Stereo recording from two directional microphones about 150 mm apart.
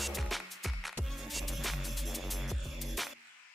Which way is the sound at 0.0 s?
Centre (ahead or behind).